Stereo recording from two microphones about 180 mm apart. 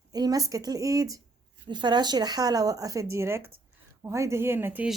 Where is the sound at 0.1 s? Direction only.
20° right (ahead or behind).